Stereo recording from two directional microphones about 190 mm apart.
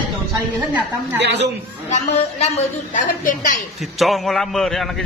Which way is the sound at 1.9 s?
35° left (ahead or behind).